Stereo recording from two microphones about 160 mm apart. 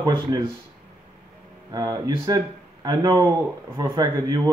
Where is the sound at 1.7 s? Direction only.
25° right (ahead or behind).